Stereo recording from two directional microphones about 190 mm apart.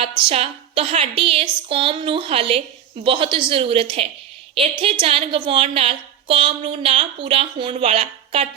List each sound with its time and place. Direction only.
0.2 s a woman's voice: 30° right (ahead or behind)